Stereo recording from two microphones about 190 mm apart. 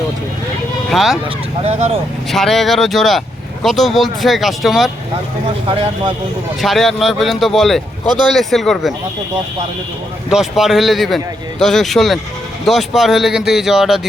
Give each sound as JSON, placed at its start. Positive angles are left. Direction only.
{"t": 0.9, "sound": "speech", "side_deg": 0}
{"t": 1.6, "sound": "speech", "side_deg": -30}
{"t": 2.3, "sound": "speech", "side_deg": 0}
{"t": 5.6, "sound": "speech", "side_deg": -30}
{"t": 6.6, "sound": "speech", "side_deg": 0}
{"t": 10.2, "sound": "speech", "side_deg": 0}